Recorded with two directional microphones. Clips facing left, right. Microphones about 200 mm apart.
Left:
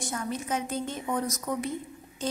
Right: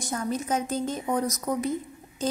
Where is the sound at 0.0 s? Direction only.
40° right (ahead or behind).